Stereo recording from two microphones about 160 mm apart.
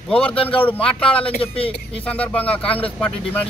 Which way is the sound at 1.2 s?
35° left (ahead or behind).